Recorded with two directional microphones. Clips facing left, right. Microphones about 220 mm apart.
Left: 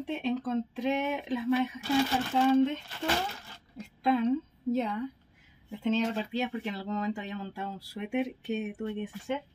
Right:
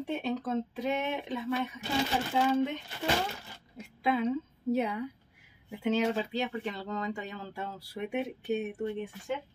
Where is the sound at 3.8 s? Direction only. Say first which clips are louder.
Left 2 dB; 5° right (ahead or behind).